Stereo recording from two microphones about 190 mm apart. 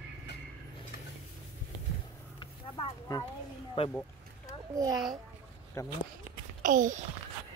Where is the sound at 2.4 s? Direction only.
20° left (ahead or behind).